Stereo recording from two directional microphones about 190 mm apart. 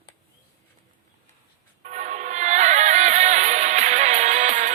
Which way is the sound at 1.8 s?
40° right (ahead or behind).